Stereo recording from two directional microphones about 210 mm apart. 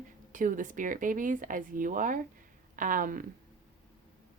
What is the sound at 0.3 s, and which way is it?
Speech, 40° right (ahead or behind).